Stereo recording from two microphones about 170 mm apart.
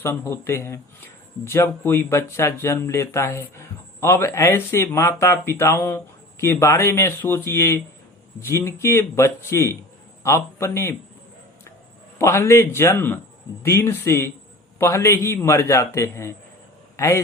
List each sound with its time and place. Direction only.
0.0 s speech: 15° left (ahead or behind)
12.2 s speech: 15° left (ahead or behind)